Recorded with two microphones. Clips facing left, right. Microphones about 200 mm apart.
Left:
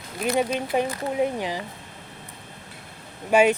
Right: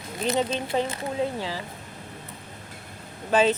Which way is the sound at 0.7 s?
15° left (ahead or behind).